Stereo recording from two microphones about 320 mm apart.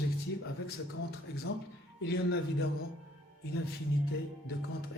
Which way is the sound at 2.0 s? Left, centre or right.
Left.